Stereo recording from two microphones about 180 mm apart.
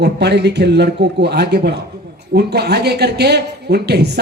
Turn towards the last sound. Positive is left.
turn(degrees=-65)  # may be behind; listen again after turning